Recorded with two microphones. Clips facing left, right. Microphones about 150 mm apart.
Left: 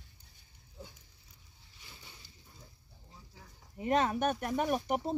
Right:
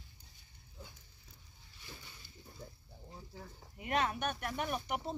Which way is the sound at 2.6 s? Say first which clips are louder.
Right 10 dB; 60° right (ahead or behind).